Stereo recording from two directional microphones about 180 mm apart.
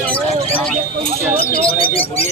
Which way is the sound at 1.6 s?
30° left (ahead or behind).